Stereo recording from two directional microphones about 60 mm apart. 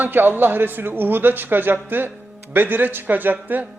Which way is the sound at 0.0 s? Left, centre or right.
Right.